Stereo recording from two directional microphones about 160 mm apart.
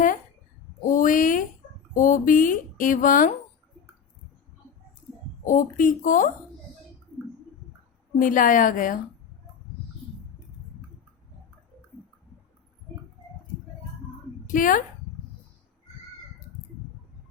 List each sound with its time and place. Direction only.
0.9 s speech: 55° left (ahead or behind)
5.5 s speech: 55° left (ahead or behind)
8.2 s speech: 60° left (ahead or behind)
14.4 s speech: 55° left (ahead or behind)